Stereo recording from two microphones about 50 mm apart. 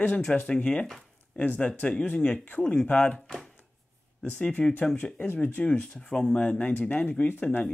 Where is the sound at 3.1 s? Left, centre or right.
Centre.